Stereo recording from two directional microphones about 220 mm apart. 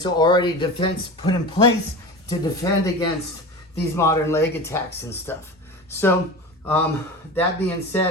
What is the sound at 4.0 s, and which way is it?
Speech, 10° left (ahead or behind).